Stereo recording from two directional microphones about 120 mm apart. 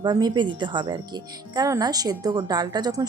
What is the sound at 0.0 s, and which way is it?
A woman's voice, 35° right (ahead or behind).